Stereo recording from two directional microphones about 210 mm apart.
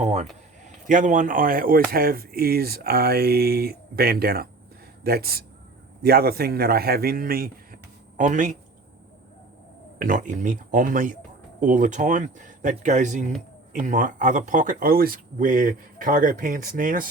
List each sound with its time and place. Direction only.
0.0 s a man's voice: 30° right (ahead or behind)
10.0 s speech: 40° right (ahead or behind)